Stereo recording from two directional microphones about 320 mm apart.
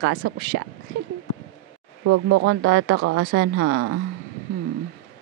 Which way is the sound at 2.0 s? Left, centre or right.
Right.